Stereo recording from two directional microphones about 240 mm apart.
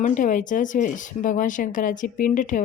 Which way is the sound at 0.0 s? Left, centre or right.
Left.